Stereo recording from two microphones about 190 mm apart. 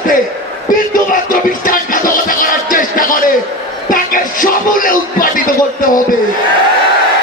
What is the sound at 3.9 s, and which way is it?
Speech, 45° left (ahead or behind).